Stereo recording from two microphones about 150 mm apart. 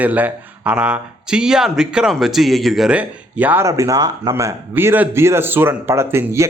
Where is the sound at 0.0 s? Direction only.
10° right (ahead or behind).